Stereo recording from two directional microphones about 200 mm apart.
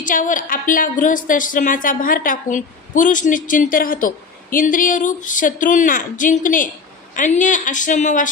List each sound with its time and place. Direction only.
0.0 s a woman's voice: 40° left (ahead or behind)